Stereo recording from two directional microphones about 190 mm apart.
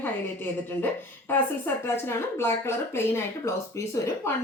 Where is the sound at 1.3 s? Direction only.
10° left (ahead or behind).